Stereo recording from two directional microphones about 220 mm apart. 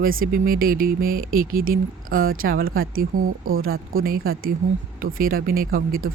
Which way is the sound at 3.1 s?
70° right (ahead or behind).